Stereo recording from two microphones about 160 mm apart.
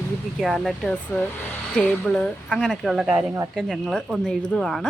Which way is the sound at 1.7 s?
5° left (ahead or behind).